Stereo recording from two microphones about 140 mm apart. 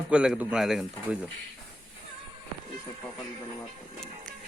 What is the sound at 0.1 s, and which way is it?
Speech, 5° right (ahead or behind).